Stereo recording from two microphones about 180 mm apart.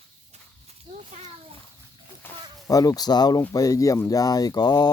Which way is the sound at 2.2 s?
15° left (ahead or behind).